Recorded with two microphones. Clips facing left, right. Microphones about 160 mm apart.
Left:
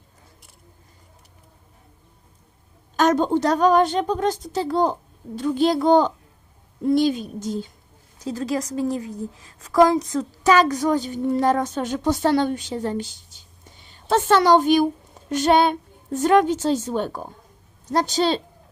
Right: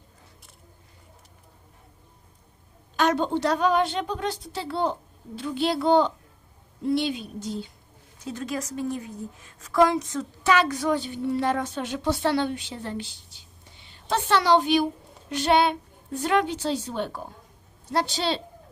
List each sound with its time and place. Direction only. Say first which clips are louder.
2.9 s a woman's voice: left 5 dB; 45° left (ahead or behind)